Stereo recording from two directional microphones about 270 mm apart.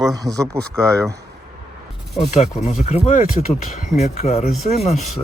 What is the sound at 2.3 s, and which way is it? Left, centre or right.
Speech, left.